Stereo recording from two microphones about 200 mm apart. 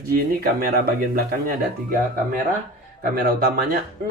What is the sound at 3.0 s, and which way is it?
Speech, 50° right (ahead or behind).